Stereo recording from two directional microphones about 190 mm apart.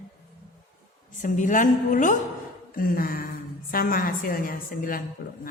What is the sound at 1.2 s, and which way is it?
A woman's voice, 45° left (ahead or behind).